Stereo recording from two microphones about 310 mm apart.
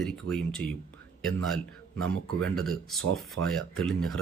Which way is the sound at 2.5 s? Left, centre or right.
Centre.